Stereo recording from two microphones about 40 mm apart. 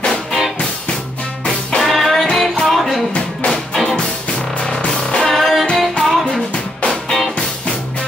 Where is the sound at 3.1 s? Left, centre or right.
Left.